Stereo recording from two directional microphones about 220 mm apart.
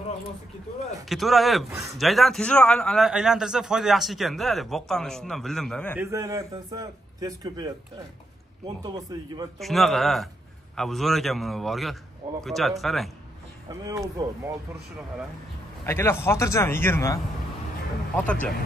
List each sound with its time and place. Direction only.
1.0 s a man's voice: centre (ahead or behind)
5.9 s a man's voice: 15° right (ahead or behind)
8.8 s a man's voice: 15° right (ahead or behind)
9.6 s a man's voice: centre (ahead or behind)
13.8 s a man's voice: 15° right (ahead or behind)
15.8 s a man's voice: 10° left (ahead or behind)